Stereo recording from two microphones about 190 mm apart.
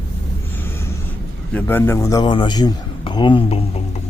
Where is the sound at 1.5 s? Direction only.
10° left (ahead or behind); by 3.8 s 30° left (ahead or behind).